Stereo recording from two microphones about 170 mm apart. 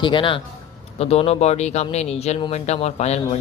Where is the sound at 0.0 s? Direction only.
30° left (ahead or behind).